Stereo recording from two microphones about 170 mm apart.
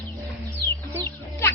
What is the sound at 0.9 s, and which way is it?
Chicken, 15° left (ahead or behind).